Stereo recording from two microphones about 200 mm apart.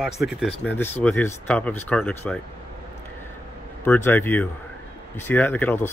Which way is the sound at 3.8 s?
10° left (ahead or behind).